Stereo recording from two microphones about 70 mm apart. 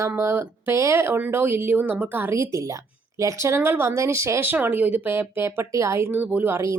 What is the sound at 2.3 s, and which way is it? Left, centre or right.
A woman's voice, right.